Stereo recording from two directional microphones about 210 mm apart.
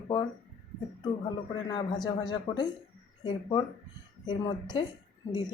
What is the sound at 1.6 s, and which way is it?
Speech, 20° left (ahead or behind).